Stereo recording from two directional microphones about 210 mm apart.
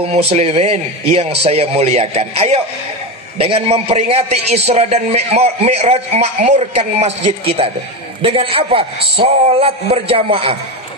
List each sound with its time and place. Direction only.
0.0 s a man's voice: 30° right (ahead or behind)